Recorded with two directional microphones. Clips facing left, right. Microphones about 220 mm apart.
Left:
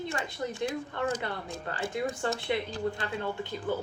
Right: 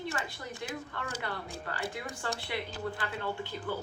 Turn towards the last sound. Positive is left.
turn(degrees=20)  # may be behind; listen again after turning